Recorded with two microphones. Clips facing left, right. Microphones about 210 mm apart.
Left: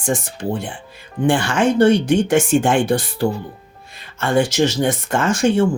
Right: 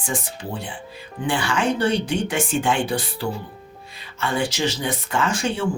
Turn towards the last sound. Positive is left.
turn(degrees=45)  # may be behind; listen again after turning